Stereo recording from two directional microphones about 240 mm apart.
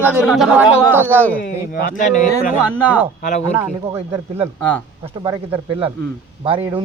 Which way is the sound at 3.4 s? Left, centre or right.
Centre.